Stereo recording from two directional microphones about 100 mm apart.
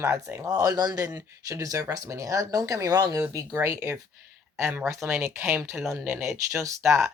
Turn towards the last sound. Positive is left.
turn(degrees=-25)  # may be behind; listen again after turning